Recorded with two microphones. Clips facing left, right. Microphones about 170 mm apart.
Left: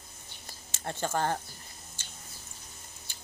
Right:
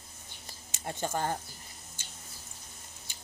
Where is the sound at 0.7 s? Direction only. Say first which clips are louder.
Left 1 dB; 15° right (ahead or behind).